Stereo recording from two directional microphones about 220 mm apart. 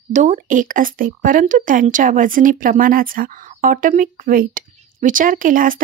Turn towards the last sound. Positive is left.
turn(degrees=-40)  # may be behind; listen again after turning